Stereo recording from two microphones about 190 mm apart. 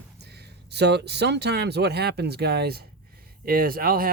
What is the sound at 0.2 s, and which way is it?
Speech, 60° right (ahead or behind).